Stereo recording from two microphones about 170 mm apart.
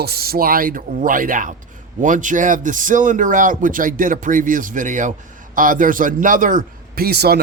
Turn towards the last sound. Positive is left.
turn(degrees=-65)  # may be behind; listen again after turning